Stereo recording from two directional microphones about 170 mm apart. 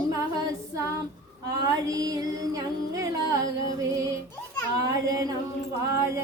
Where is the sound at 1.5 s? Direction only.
20° right (ahead or behind).